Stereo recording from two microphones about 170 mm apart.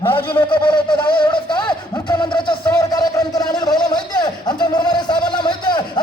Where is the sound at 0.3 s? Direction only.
30° left (ahead or behind).